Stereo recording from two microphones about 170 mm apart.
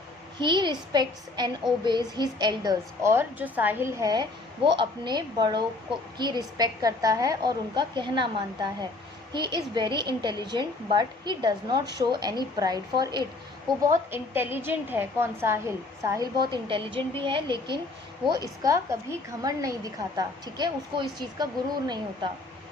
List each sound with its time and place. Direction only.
0.3 s a woman's voice: 25° right (ahead or behind)
13.8 s a woman's voice: 10° right (ahead or behind)